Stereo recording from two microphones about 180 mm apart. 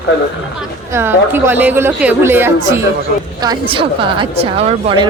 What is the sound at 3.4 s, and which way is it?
A woman's voice, 25° right (ahead or behind).